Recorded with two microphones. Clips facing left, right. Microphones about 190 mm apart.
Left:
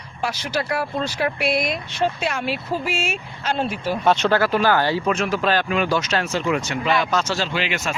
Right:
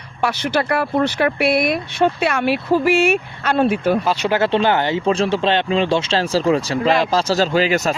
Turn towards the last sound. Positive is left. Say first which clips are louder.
# right 8 dB
turn(degrees=-40)  # may be behind; listen again after turning